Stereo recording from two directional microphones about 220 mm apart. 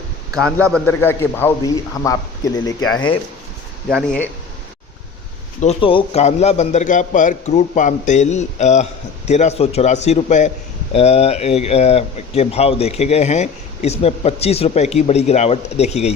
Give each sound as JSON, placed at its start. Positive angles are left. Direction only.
{"t": 1.0, "sound": "speech", "side_deg": 10}
{"t": 3.8, "sound": "speech", "side_deg": 0}
{"t": 5.5, "sound": "a man's voice", "side_deg": 25}